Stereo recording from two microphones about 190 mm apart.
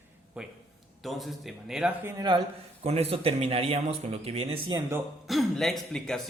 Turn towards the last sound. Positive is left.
turn(degrees=0)  # may be behind; listen again after turning